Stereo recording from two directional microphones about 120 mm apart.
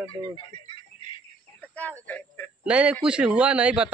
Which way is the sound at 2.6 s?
10° right (ahead or behind).